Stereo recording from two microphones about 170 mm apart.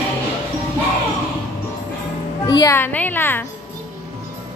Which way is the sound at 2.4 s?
25° left (ahead or behind).